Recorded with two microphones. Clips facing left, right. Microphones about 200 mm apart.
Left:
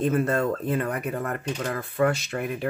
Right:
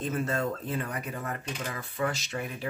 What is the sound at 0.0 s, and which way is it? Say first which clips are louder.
Speech: left 7 dB; 55° left (ahead or behind).